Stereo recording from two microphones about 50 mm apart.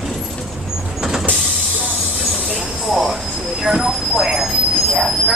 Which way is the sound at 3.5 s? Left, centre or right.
Centre.